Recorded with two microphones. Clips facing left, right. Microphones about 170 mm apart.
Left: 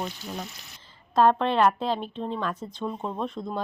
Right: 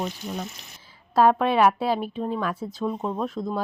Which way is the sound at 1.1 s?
10° right (ahead or behind).